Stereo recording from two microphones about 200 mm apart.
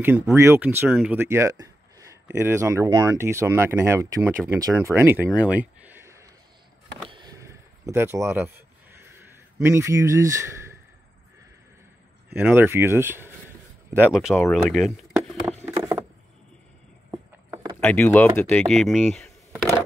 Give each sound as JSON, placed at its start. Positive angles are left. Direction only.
{"t": 0.0, "sound": "speech", "side_deg": -10}
{"t": 7.1, "sound": "a sound", "side_deg": -20}
{"t": 9.6, "sound": "speech", "side_deg": -15}
{"t": 12.4, "sound": "speech", "side_deg": -10}
{"t": 17.1, "sound": "a sound", "side_deg": -15}
{"t": 17.7, "sound": "speech", "side_deg": 10}